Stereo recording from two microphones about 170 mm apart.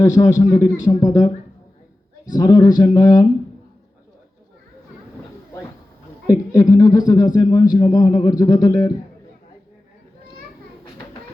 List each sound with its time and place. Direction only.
0.0 s a man's voice: 20° left (ahead or behind)
2.3 s a man's voice: 20° left (ahead or behind)
6.2 s a man's voice: 20° left (ahead or behind)